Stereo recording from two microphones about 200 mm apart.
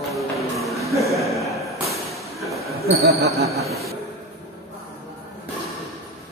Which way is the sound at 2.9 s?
55° right (ahead or behind).